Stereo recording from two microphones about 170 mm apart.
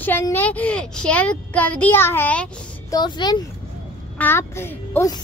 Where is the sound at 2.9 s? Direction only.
25° left (ahead or behind).